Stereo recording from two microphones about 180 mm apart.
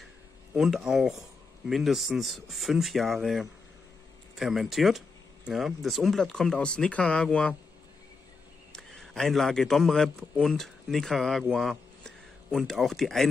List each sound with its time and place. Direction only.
0.6 s speech: centre (ahead or behind)
8.7 s a man's voice: 5° left (ahead or behind)